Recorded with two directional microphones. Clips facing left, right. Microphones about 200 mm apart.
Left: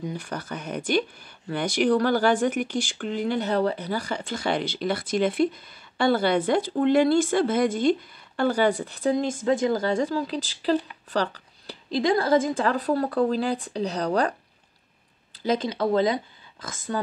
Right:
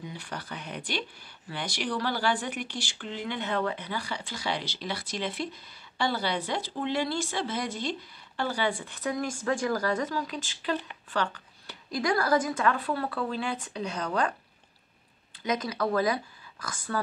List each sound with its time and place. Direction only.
0.0 s a woman's voice: 45° left (ahead or behind)
15.4 s speech: 30° left (ahead or behind)